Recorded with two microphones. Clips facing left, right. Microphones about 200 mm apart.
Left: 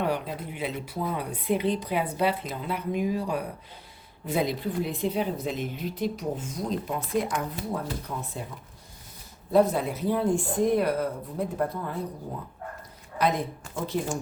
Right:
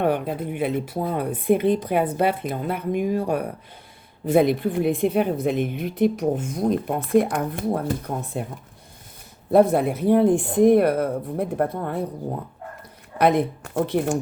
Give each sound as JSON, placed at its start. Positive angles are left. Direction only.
{"t": 0.0, "sound": "a woman's voice", "side_deg": -55}
{"t": 9.5, "sound": "a woman's voice", "side_deg": -60}
{"t": 13.1, "sound": "a woman's voice", "side_deg": -60}